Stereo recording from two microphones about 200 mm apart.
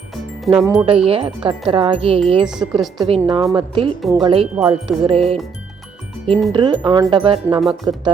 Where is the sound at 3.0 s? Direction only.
25° right (ahead or behind).